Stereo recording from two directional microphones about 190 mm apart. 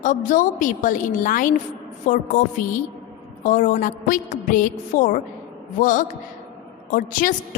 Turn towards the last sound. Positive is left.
turn(degrees=45)  # may be behind; listen again after turning